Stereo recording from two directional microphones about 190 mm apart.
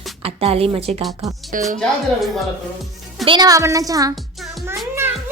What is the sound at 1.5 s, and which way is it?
Speech, 45° right (ahead or behind).